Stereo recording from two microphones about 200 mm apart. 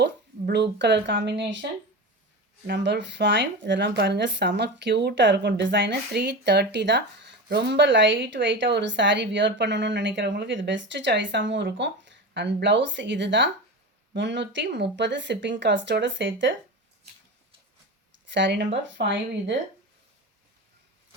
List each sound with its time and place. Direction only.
0.0 s speech: 55° right (ahead or behind)
2.6 s a woman's voice: 60° right (ahead or behind)
18.3 s a woman's voice: 60° right (ahead or behind)